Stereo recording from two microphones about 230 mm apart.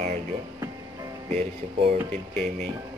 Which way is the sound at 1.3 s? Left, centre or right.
Right.